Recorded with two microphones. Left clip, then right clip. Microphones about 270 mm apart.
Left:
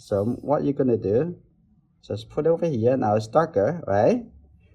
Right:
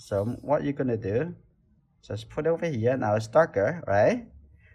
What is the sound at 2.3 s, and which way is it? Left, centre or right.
Speech, centre.